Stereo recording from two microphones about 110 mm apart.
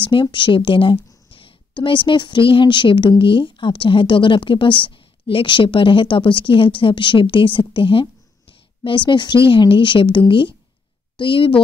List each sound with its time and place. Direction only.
0.0 s a woman's voice: 50° left (ahead or behind)